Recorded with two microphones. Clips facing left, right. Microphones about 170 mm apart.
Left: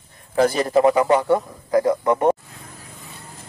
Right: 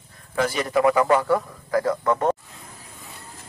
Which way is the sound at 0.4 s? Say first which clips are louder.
Left 5 dB; 35° left (ahead or behind).